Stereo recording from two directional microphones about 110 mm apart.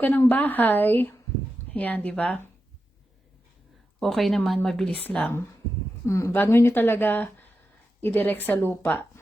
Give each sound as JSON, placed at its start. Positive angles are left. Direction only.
{"t": 0.0, "sound": "a woman's voice", "side_deg": 15}
{"t": 4.0, "sound": "a woman's voice", "side_deg": 0}
{"t": 6.1, "sound": "a woman's voice", "side_deg": 25}